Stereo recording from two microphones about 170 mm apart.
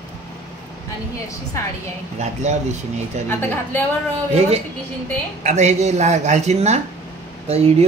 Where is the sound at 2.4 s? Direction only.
40° right (ahead or behind).